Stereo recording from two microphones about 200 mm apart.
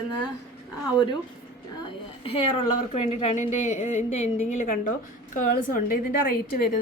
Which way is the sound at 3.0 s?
30° left (ahead or behind).